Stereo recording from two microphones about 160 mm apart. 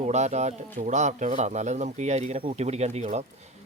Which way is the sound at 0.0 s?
45° right (ahead or behind).